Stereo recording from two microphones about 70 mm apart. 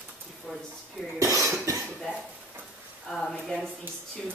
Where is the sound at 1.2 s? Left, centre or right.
Right.